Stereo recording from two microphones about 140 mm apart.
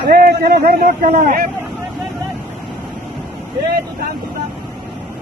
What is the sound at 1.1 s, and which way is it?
Speech, 65° right (ahead or behind).